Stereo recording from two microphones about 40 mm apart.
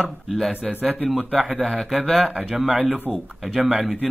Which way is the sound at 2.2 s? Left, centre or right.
Centre.